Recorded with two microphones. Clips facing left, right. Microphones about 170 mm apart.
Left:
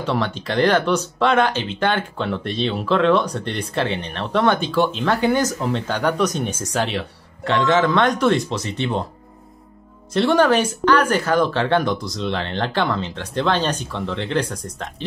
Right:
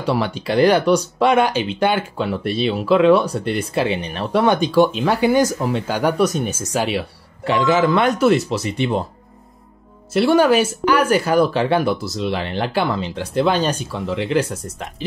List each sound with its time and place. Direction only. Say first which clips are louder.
0.0 s speech: right 2 dB; 10° right (ahead or behind)
10.1 s speech: right 2 dB; 10° right (ahead or behind)